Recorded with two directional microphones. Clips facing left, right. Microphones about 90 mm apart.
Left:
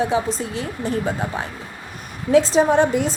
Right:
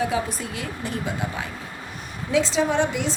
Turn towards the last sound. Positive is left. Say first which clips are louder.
# left 6 dB
turn(degrees=40)  # may be behind; listen again after turning